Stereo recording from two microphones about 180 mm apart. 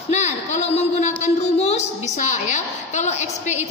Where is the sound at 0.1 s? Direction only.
40° left (ahead or behind).